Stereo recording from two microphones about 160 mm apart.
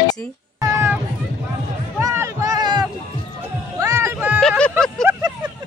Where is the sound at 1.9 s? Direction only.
15° right (ahead or behind).